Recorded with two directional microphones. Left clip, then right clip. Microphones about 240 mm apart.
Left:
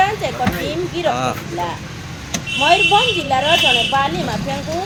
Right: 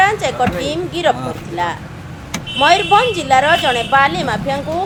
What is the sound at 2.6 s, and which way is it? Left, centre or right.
A woman's voice, centre.